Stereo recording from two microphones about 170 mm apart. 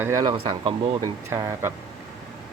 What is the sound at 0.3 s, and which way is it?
Speech, 30° right (ahead or behind).